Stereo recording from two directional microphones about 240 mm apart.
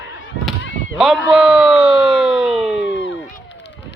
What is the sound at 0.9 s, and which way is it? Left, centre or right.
A man's voice, centre.